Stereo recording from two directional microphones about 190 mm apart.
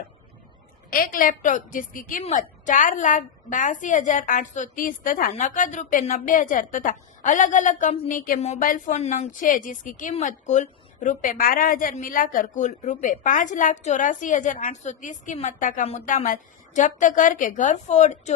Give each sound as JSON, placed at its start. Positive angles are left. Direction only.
{"t": 0.9, "sound": "a woman's voice", "side_deg": 50}